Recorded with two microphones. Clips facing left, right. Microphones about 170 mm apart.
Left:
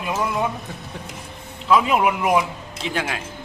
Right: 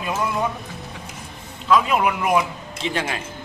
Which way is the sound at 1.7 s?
10° left (ahead or behind).